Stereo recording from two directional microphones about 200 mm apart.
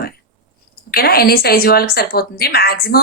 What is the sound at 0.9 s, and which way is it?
A woman's voice, 50° left (ahead or behind).